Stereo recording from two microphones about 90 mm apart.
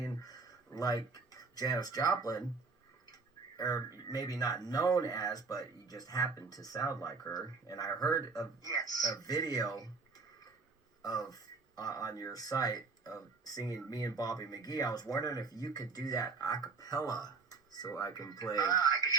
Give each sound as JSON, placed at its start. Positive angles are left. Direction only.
{"t": 0.2, "sound": "speech", "side_deg": 45}
{"t": 3.6, "sound": "speech", "side_deg": 45}
{"t": 11.0, "sound": "speech", "side_deg": 45}